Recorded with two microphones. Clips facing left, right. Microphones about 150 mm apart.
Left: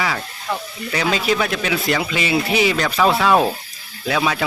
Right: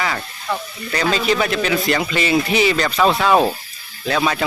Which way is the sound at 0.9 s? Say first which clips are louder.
Right 1 dB; 5° left (ahead or behind).